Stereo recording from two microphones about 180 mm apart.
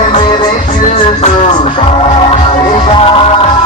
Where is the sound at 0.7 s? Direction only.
40° left (ahead or behind).